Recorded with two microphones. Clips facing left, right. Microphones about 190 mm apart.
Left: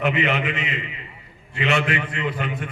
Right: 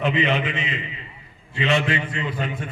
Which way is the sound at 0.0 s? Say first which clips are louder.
Even; 25° right (ahead or behind).